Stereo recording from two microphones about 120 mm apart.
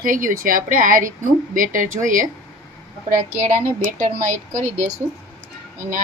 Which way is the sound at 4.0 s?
90° right.